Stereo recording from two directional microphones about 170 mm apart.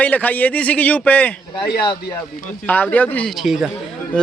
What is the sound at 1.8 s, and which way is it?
Speech, 25° left (ahead or behind).